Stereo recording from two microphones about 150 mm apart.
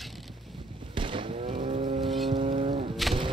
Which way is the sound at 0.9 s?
35° right (ahead or behind).